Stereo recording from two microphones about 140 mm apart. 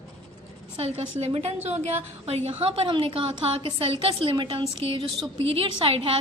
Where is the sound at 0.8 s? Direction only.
45° right (ahead or behind).